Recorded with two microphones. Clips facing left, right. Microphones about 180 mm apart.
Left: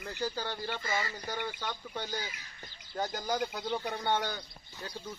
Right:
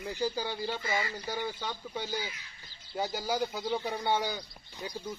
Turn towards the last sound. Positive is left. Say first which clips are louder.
# right 3 dB
turn(degrees=-10)  # may be behind; listen again after turning